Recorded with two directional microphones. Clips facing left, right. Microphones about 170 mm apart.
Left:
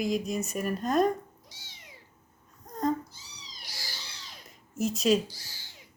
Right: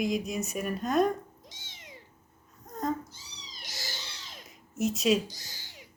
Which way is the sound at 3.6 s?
20° right (ahead or behind).